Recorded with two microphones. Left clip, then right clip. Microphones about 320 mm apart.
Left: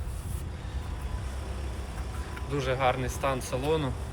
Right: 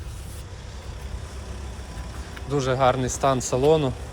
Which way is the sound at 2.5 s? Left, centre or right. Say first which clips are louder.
Right 6 dB; centre.